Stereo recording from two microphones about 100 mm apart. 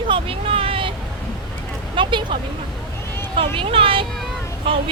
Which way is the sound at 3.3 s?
60° right (ahead or behind).